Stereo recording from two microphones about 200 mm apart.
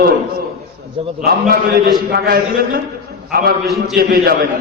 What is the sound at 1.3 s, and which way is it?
A man's voice, 45° right (ahead or behind).